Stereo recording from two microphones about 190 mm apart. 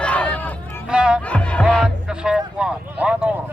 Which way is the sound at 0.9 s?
5° right (ahead or behind).